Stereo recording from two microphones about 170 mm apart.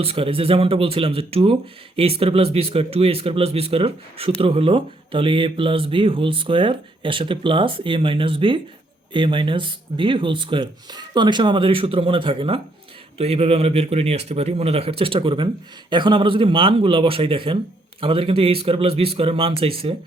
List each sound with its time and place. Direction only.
0.0 s speech: 35° right (ahead or behind)